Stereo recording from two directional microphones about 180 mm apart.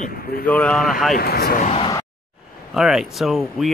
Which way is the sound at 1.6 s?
35° left (ahead or behind).